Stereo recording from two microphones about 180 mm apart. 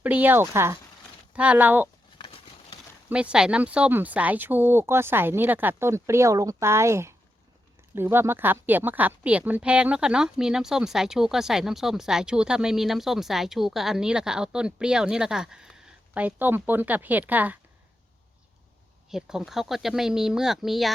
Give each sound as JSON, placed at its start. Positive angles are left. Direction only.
{"t": 0.0, "sound": "speech", "side_deg": -10}
{"t": 2.1, "sound": "a sound", "side_deg": 30}
{"t": 3.1, "sound": "speech", "side_deg": -5}
{"t": 19.1, "sound": "speech", "side_deg": 0}